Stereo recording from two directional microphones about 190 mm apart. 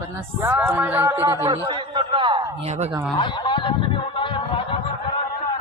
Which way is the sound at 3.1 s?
25° left (ahead or behind).